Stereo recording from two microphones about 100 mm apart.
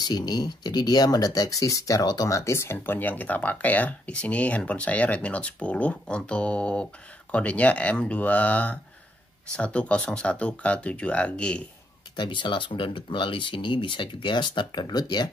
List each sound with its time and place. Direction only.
0.0 s speech: 45° left (ahead or behind); by 11.6 s 10° left (ahead or behind)
12.2 s speech: 55° left (ahead or behind)